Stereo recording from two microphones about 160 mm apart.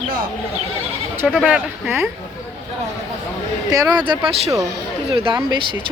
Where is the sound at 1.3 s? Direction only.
5° right (ahead or behind).